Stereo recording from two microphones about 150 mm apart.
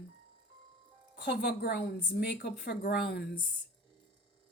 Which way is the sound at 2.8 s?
90° left.